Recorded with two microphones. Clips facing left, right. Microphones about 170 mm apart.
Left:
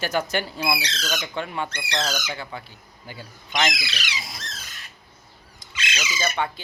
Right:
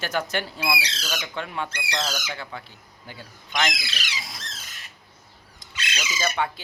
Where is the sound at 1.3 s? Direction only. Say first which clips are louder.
Left 2 dB; centre (ahead or behind).